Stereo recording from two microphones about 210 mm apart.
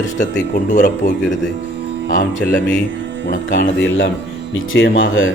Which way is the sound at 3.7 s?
60° left (ahead or behind).